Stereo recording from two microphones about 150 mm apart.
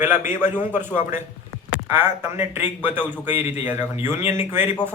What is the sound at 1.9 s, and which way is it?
A man's voice, 15° right (ahead or behind).